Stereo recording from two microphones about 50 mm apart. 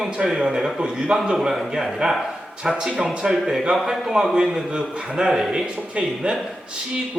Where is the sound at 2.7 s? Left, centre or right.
Right.